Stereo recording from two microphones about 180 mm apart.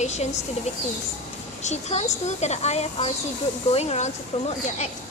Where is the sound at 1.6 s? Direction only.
40° left (ahead or behind).